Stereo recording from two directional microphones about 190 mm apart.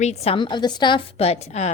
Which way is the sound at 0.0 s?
35° left (ahead or behind).